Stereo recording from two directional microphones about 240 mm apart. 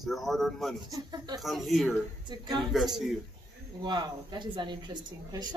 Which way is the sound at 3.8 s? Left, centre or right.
Centre.